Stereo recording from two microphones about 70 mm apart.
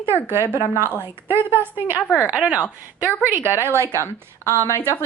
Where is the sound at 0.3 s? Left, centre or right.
Right.